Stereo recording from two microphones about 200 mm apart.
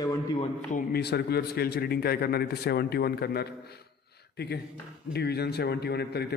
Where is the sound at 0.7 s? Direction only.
55° left (ahead or behind).